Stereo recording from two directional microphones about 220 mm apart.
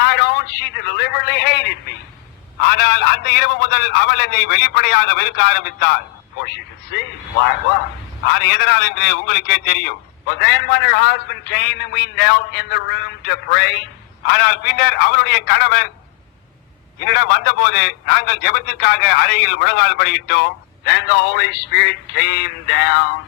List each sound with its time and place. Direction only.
0.0 s a sound: 50° left (ahead or behind)
2.6 s a man's voice: 50° left (ahead or behind)
8.3 s a man's voice: 50° left (ahead or behind)
17.0 s a man's voice: 50° left (ahead or behind)